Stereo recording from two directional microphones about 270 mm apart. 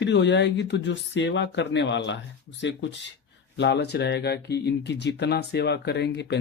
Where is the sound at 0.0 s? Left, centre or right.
Left.